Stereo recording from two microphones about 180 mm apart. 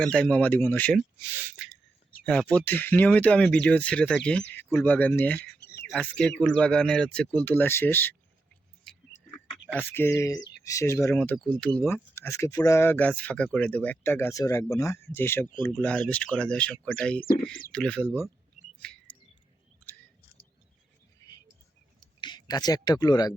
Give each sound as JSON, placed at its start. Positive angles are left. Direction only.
{"t": 0.0, "sound": "speech", "side_deg": 5}
{"t": 2.2, "sound": "speech", "side_deg": 5}
{"t": 5.4, "sound": "a sound", "side_deg": 65}
{"t": 5.9, "sound": "speech", "side_deg": 5}
{"t": 8.9, "sound": "a sound", "side_deg": 5}
{"t": 9.7, "sound": "speech", "side_deg": 10}
{"t": 18.6, "sound": "chirp", "side_deg": 40}
{"t": 21.2, "sound": "whispering", "side_deg": 20}
{"t": 22.2, "sound": "speech", "side_deg": 25}